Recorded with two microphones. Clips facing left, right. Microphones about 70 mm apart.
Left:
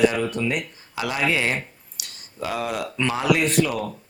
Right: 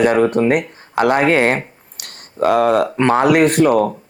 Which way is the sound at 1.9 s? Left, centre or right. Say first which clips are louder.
Right 10 dB; right.